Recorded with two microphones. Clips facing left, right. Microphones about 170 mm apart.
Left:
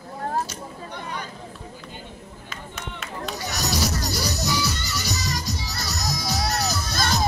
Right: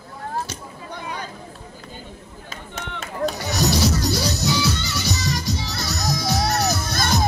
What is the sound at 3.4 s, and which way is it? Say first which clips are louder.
Music: right 4 dB; 25° right (ahead or behind).